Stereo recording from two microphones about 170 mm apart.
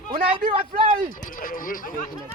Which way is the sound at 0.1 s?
30° right (ahead or behind).